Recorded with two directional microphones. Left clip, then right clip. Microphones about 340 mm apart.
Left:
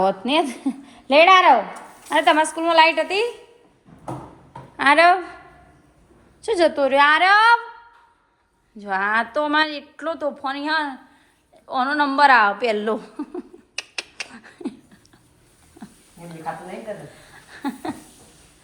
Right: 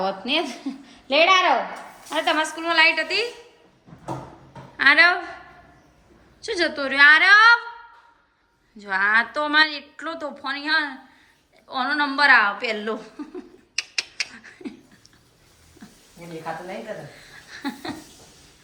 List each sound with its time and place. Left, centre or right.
0.0 s a woman's voice: centre
4.8 s a woman's voice: centre
6.4 s a woman's voice: centre
8.8 s a woman's voice: centre
11.7 s a sound: centre
17.2 s a sound: centre